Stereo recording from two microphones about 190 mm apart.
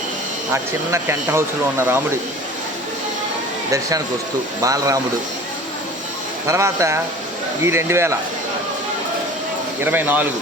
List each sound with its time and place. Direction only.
0.5 s speech: 15° right (ahead or behind)
3.7 s speech: 15° right (ahead or behind)
6.5 s speech: 15° right (ahead or behind)
9.8 s speech: 10° right (ahead or behind)